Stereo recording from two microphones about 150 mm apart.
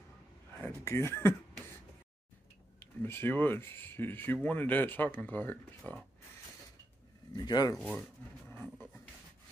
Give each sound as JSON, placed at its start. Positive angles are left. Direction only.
{"t": 0.6, "sound": "a sound", "side_deg": 15}
{"t": 2.8, "sound": "speech", "side_deg": 15}
{"t": 7.3, "sound": "speech", "side_deg": 25}
{"t": 7.7, "sound": "speech", "side_deg": 0}